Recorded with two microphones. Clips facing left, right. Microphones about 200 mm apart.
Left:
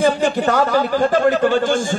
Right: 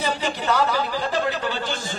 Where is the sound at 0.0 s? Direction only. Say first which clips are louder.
Left 9 dB; 50° left (ahead or behind).